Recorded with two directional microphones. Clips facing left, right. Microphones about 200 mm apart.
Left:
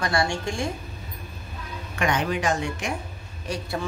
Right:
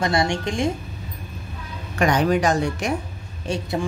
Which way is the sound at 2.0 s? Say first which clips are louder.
Right 6 dB; 40° right (ahead or behind).